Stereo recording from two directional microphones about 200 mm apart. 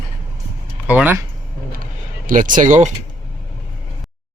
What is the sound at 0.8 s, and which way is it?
Speech, 10° right (ahead or behind).